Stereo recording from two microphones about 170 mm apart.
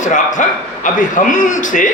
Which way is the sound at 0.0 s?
45° left (ahead or behind).